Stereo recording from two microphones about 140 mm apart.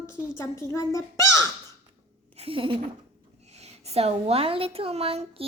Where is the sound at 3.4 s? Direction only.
50° right (ahead or behind).